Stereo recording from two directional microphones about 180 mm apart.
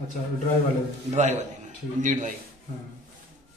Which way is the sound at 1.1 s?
40° right (ahead or behind).